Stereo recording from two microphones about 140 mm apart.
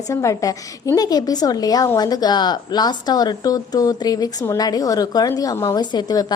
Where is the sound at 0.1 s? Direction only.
20° left (ahead or behind).